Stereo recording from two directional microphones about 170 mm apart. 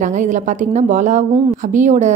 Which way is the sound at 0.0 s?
45° right (ahead or behind).